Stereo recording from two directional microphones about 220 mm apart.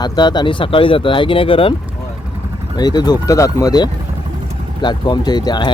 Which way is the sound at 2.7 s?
20° left (ahead or behind).